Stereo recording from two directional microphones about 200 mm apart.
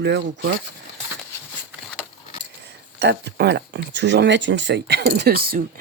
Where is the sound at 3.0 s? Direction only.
55° right (ahead or behind).